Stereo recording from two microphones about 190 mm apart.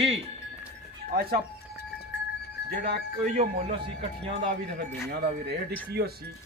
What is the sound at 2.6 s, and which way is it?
Speech, 60° right (ahead or behind).